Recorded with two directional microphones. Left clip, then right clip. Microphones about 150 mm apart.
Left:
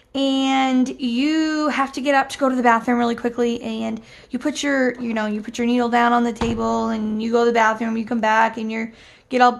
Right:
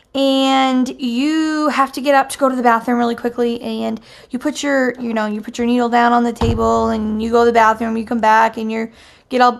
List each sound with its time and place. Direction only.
0.1 s speech: 20° right (ahead or behind)